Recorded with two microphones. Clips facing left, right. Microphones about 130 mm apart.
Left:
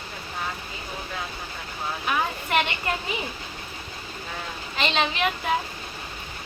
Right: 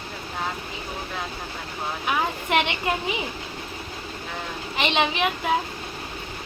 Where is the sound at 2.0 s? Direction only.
15° right (ahead or behind).